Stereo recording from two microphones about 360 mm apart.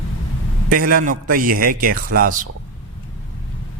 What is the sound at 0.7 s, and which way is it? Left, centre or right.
A man's voice, right.